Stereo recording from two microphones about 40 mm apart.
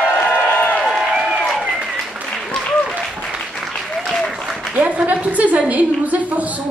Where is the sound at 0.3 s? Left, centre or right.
Left.